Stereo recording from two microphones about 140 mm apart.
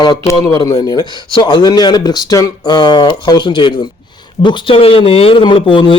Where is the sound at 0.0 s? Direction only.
30° left (ahead or behind).